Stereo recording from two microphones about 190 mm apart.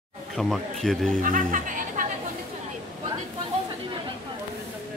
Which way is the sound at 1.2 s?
45° right (ahead or behind).